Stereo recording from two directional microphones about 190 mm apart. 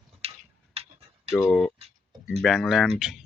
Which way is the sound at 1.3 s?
5° left (ahead or behind).